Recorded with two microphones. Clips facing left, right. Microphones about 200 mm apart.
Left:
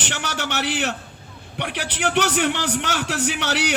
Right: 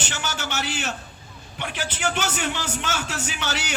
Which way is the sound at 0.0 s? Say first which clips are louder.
Left 3 dB; 70° left (ahead or behind).